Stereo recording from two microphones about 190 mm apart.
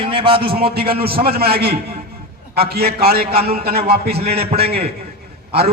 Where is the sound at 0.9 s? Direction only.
55° right (ahead or behind).